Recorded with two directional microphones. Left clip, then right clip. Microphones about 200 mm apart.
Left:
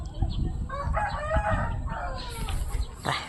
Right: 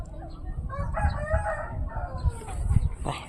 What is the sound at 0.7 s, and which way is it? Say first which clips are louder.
Chicken: left 3 dB; 35° left (ahead or behind).